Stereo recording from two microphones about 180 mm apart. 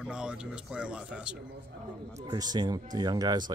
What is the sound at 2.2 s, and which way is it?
Speech, 20° right (ahead or behind).